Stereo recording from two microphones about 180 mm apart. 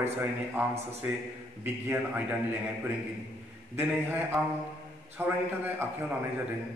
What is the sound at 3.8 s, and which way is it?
Speech, 10° right (ahead or behind).